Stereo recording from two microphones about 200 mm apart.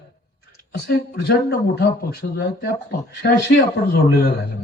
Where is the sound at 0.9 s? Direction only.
50° left (ahead or behind).